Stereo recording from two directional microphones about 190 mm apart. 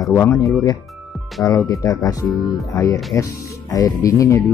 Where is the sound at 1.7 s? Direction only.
20° left (ahead or behind).